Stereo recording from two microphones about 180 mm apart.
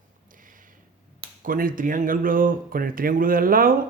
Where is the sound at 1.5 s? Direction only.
50° right (ahead or behind).